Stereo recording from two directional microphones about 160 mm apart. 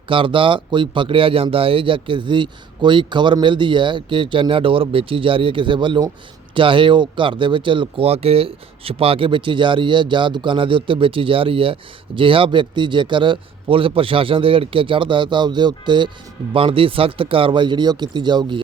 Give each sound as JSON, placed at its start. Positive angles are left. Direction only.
{"t": 0.1, "sound": "speech", "side_deg": -30}